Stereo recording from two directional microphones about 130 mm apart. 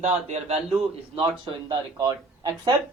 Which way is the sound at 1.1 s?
40° right (ahead or behind).